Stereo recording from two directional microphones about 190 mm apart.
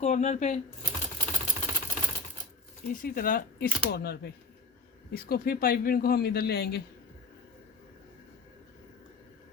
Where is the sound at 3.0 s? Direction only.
50° left (ahead or behind).